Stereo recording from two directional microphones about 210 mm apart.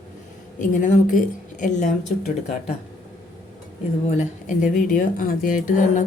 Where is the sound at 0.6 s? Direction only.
35° left (ahead or behind).